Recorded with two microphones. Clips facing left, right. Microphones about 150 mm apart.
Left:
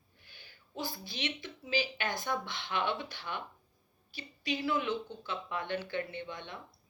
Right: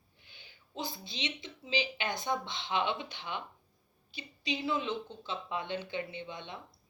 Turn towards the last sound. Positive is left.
turn(degrees=-20)  # may be behind; listen again after turning